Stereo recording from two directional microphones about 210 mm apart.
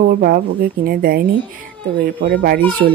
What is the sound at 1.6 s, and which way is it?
Music, 40° right (ahead or behind).